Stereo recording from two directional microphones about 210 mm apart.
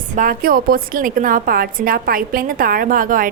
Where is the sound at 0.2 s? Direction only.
45° right (ahead or behind).